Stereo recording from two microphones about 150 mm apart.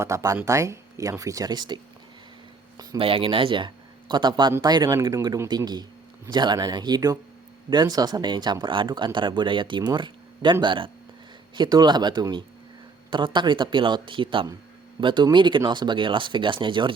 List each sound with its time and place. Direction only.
0.0 s speech: 20° right (ahead or behind)
3.0 s speech: 35° right (ahead or behind)